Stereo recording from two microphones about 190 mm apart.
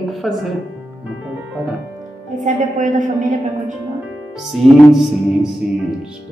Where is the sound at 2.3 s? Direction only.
40° right (ahead or behind).